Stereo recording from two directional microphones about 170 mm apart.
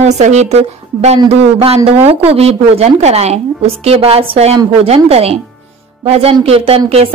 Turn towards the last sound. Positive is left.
turn(degrees=-35)  # may be behind; listen again after turning